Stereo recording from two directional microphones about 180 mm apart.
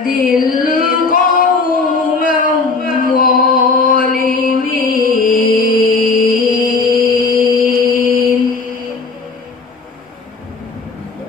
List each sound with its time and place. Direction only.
0.0 s singing: 50° left (ahead or behind)
2.8 s music: 50° left (ahead or behind)
7.6 s music: 50° right (ahead or behind)